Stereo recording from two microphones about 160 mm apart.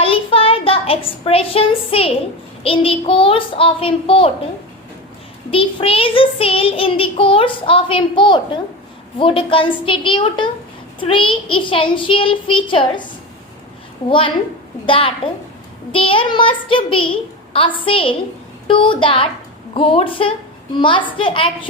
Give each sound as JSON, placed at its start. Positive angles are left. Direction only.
{"t": 0.0, "sound": "a sound", "side_deg": 35}
{"t": 2.6, "sound": "child singing", "side_deg": 35}
{"t": 5.5, "sound": "child singing", "side_deg": 35}
{"t": 14.8, "sound": "child singing", "side_deg": 35}